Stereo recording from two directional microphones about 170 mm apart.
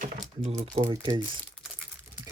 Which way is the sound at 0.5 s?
35° right (ahead or behind).